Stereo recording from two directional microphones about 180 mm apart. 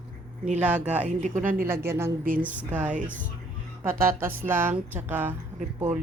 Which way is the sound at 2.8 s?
45° right (ahead or behind).